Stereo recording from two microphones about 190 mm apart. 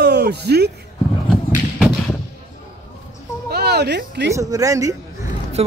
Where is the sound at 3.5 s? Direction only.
60° right (ahead or behind).